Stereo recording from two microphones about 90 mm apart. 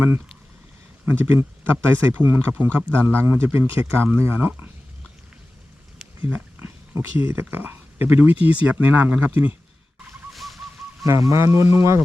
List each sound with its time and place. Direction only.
1.0 s speech: 25° right (ahead or behind)
6.9 s speech: 25° right (ahead or behind)
10.3 s a sound: centre (ahead or behind)
11.0 s speech: 35° right (ahead or behind)